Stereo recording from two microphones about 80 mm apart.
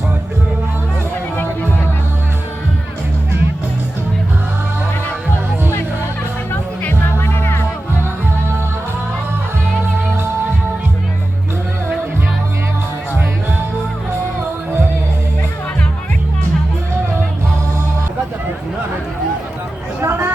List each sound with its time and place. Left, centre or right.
6.5 s music: left
20.0 s hubbub: right